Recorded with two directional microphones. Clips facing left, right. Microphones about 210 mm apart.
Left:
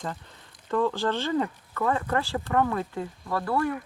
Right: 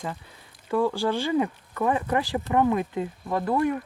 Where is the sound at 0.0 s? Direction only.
5° right (ahead or behind).